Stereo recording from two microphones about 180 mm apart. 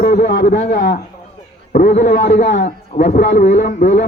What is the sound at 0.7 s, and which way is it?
Speech, 65° left (ahead or behind).